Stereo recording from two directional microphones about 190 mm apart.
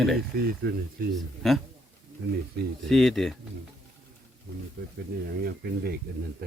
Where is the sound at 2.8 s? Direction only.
Centre (ahead or behind).